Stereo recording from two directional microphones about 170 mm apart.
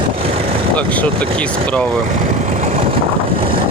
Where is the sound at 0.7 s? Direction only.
10° left (ahead or behind).